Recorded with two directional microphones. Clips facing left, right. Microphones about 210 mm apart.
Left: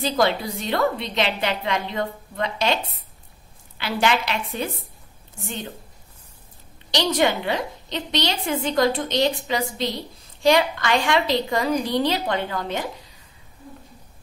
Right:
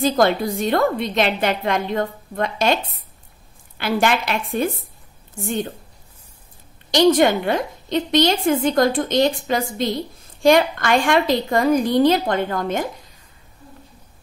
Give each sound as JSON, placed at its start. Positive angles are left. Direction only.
{"t": 0.0, "sound": "a woman's voice", "side_deg": -50}
{"t": 6.9, "sound": "a woman's voice", "side_deg": -50}